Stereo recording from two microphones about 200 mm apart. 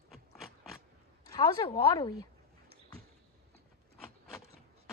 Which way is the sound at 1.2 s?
15° left (ahead or behind).